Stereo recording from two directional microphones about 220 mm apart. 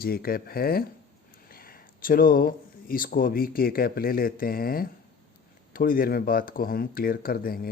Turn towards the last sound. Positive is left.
turn(degrees=40)  # may be behind; listen again after turning